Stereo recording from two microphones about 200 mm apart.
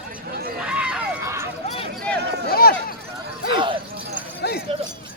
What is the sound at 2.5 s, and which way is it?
Run, 50° left (ahead or behind).